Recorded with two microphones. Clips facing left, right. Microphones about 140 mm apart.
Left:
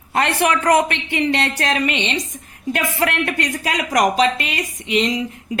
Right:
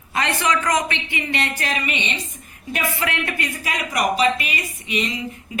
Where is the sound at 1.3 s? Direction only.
75° left (ahead or behind).